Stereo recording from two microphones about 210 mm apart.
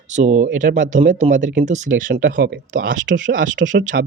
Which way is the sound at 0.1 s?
35° right (ahead or behind).